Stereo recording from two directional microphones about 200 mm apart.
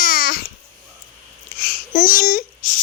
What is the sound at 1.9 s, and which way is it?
Speech, 40° left (ahead or behind).